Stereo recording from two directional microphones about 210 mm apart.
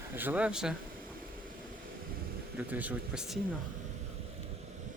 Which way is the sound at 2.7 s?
5° right (ahead or behind).